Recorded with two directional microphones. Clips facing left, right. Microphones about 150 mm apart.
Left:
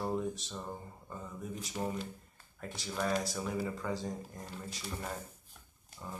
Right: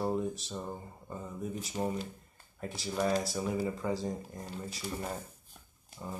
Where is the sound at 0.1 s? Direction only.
10° right (ahead or behind).